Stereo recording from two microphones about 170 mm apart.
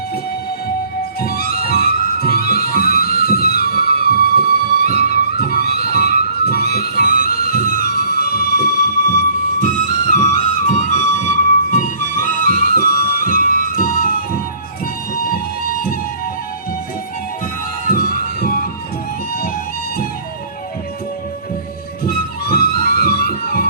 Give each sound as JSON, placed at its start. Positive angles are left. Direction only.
{"t": 1.2, "sound": "music", "side_deg": 60}
{"t": 17.8, "sound": "music", "side_deg": 55}
{"t": 22.0, "sound": "music", "side_deg": 60}